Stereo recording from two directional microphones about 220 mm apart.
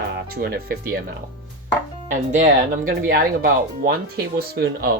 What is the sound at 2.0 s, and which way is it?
Speech, 35° right (ahead or behind).